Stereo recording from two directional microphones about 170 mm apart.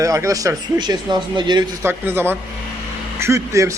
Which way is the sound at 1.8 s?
10° right (ahead or behind).